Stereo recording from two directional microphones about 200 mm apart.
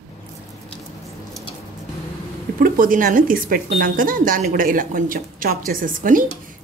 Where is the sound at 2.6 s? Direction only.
45° right (ahead or behind).